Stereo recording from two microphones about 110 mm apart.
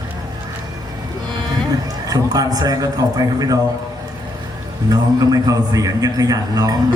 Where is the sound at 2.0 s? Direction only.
35° right (ahead or behind).